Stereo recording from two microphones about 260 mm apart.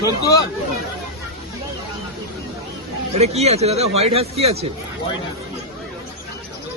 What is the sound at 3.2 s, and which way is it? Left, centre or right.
Speech, right.